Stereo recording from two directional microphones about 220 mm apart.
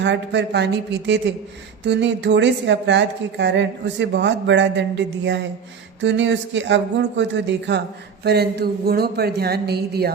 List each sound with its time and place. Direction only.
0.0 s speech: 50° right (ahead or behind)